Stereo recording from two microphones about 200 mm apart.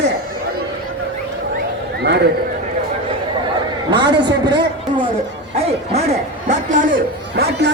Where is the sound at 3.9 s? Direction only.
20° right (ahead or behind).